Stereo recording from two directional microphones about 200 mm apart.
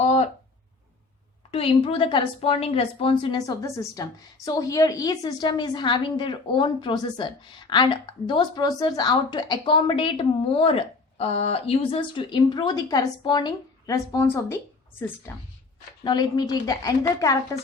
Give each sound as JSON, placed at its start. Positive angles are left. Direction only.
{"t": 0.0, "sound": "a sound", "side_deg": 35}
{"t": 1.5, "sound": "a woman's voice", "side_deg": 30}
{"t": 16.0, "sound": "a woman's voice", "side_deg": 20}